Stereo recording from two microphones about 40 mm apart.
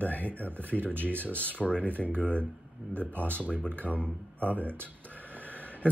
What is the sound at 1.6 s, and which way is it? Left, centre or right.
Speech, centre.